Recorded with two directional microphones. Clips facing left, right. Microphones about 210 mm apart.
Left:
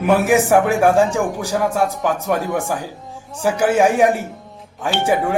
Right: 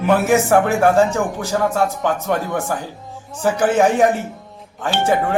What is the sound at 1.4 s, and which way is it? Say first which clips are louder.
Speech: right 2 dB; 15° left (ahead or behind).